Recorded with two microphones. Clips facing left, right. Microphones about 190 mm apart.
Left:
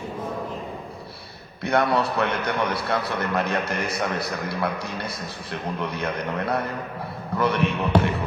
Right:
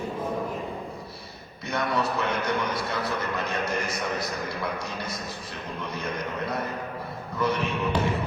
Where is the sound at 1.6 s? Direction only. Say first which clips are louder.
Left 6 dB; 65° left (ahead or behind).